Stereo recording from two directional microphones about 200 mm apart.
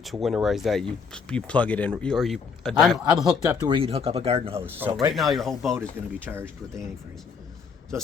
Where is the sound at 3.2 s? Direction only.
20° right (ahead or behind).